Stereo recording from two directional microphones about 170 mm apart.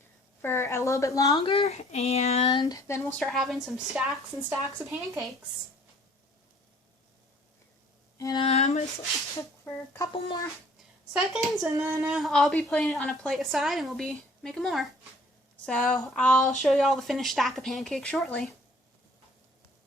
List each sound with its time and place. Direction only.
0.4 s a woman's voice: 15° left (ahead or behind); by 2.5 s 40° left (ahead or behind)
2.5 s a woman's voice: 25° left (ahead or behind)
3.1 s a woman's voice: 5° left (ahead or behind)
8.2 s a woman's voice: 25° left (ahead or behind)
8.4 s speech: 40° left (ahead or behind)
9.6 s speech: 15° left (ahead or behind)
11.1 s a woman's voice: centre (ahead or behind)
11.7 s a woman's voice: 15° right (ahead or behind); by 16.4 s 5° left (ahead or behind)
16.4 s speech: 45° left (ahead or behind)
16.6 s a woman's voice: centre (ahead or behind)